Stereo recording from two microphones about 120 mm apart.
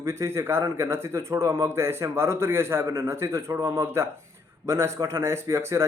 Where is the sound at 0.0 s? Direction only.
25° right (ahead or behind).